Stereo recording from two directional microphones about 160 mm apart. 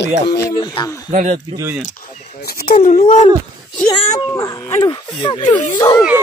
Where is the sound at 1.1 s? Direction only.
50° right (ahead or behind).